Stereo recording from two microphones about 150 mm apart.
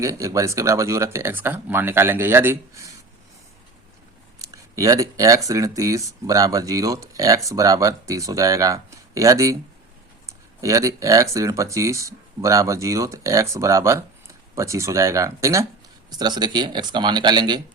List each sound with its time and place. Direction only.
0.0 s speech: 20° right (ahead or behind)
4.4 s speech: 20° right (ahead or behind)
10.6 s speech: 20° right (ahead or behind)